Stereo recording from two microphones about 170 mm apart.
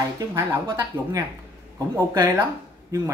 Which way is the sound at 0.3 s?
15° right (ahead or behind).